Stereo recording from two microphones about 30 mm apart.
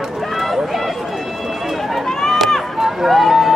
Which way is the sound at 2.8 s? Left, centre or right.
Centre.